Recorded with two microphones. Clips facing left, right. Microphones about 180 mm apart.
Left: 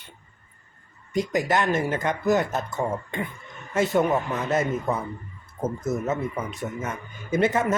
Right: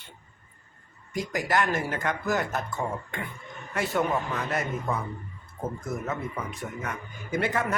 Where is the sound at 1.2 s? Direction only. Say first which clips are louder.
Left 4 dB; 20° left (ahead or behind).